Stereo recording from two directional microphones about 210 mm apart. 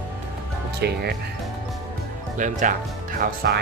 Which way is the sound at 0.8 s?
50° right (ahead or behind).